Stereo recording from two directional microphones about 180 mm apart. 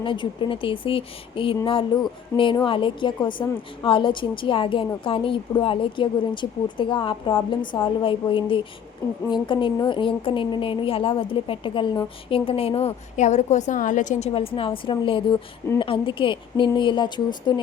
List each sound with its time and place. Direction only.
0.0 s a woman's voice: 25° left (ahead or behind)